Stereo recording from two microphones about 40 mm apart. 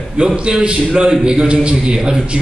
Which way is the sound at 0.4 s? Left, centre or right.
Right.